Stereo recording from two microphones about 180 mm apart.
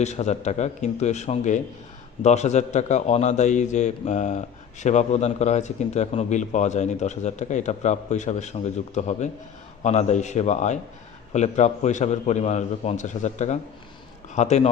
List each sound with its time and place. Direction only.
0.0 s a man's voice: 40° left (ahead or behind)